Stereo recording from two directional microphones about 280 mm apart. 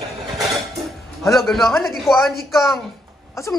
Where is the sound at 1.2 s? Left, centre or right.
Centre.